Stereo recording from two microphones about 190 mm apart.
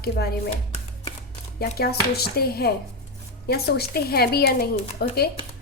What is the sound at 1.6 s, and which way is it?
Speech, 55° left (ahead or behind).